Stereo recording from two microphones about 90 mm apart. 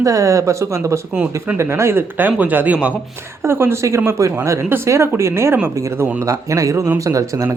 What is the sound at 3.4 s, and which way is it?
Speech, 25° right (ahead or behind).